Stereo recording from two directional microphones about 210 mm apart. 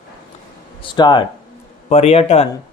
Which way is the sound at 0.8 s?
20° left (ahead or behind).